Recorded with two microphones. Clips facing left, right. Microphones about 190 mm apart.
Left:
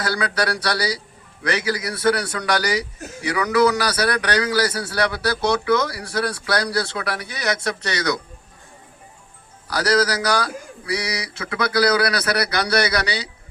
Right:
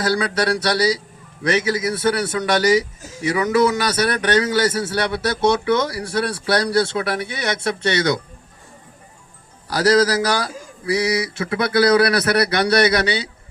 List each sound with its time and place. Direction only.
0.0 s a man's voice: 30° right (ahead or behind)
9.6 s a man's voice: 30° right (ahead or behind)